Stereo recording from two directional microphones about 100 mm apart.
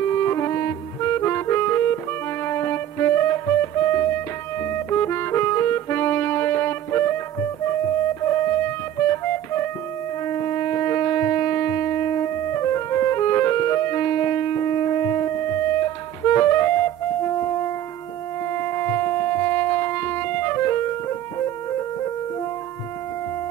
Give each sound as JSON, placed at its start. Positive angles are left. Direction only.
{"t": 0.0, "sound": "music", "side_deg": 25}